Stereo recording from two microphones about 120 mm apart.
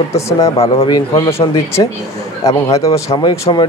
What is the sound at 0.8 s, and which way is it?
Speech, 35° left (ahead or behind).